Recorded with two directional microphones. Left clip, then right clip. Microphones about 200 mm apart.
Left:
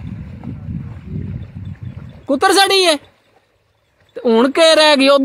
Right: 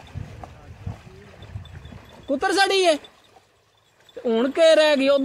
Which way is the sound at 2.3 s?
45° left (ahead or behind).